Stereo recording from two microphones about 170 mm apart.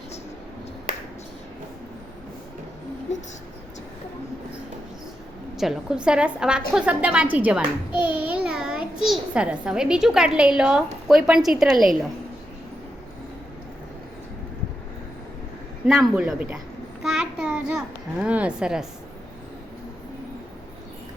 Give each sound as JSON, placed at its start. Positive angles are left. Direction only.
{"t": 3.1, "sound": "speech", "side_deg": 45}
{"t": 5.5, "sound": "a child's voice", "side_deg": -5}
{"t": 15.9, "sound": "a child's voice", "side_deg": -5}
{"t": 17.0, "sound": "a sound", "side_deg": -5}